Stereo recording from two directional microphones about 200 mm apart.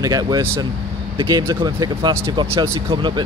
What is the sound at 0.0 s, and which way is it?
Speech, 20° right (ahead or behind).